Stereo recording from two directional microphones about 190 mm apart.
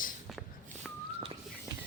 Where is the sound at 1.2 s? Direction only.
25° right (ahead or behind).